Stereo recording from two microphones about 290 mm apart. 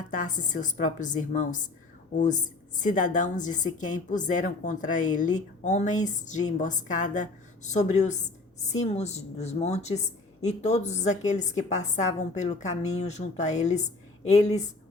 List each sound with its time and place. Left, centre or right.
0.1 s a woman's voice: left